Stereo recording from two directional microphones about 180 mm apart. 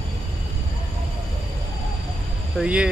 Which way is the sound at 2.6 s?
5° right (ahead or behind).